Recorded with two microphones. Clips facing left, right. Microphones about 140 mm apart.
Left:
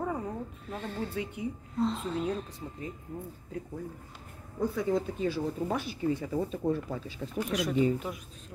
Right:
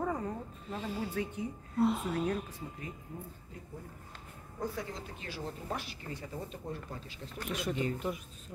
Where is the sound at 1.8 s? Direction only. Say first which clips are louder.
Right 1 dB; 10° right (ahead or behind).